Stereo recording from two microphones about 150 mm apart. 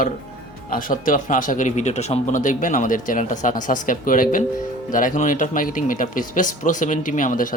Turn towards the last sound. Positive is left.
turn(degrees=60)  # may be behind; listen again after turning